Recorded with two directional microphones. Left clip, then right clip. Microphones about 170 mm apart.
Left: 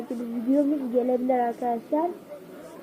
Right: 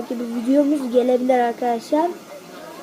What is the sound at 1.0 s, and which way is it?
Speech, 20° right (ahead or behind).